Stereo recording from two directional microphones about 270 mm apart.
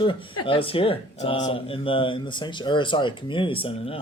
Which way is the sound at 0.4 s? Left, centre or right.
Centre.